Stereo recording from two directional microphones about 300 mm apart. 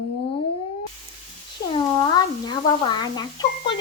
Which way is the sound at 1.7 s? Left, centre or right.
Centre.